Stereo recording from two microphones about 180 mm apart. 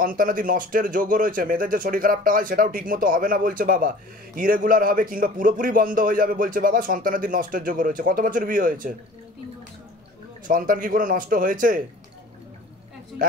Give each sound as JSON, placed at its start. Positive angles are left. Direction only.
{"t": 0.0, "sound": "speech", "side_deg": -50}
{"t": 10.4, "sound": "speech", "side_deg": -50}
{"t": 13.2, "sound": "speech", "side_deg": -50}